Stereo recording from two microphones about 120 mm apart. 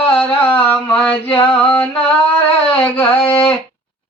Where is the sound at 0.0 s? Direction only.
15° left (ahead or behind).